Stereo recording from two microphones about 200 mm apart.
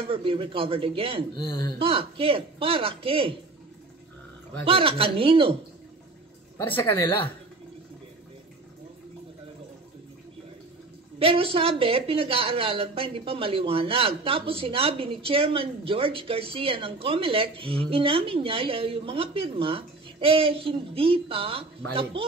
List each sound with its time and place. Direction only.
0.1 s speech: 25° right (ahead or behind)
1.3 s speech: 20° left (ahead or behind)
1.8 s speech: 25° right (ahead or behind)
4.6 s speech: 25° right (ahead or behind)
6.6 s a woman's voice: 10° left (ahead or behind)
11.1 s speech: 30° right (ahead or behind)